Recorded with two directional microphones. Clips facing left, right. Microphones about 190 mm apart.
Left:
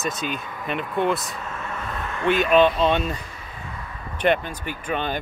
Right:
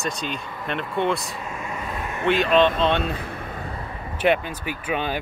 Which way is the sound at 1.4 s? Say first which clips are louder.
Right 2 dB; 10° right (ahead or behind).